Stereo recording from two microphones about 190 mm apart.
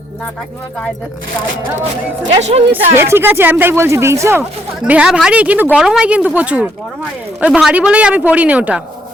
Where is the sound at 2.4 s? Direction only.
35° right (ahead or behind).